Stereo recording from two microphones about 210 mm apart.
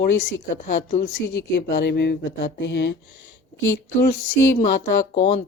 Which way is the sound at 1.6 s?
55° left (ahead or behind).